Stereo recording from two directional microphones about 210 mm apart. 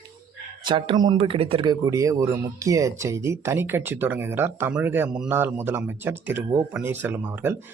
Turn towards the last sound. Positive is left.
turn(degrees=-10)  # may be behind; listen again after turning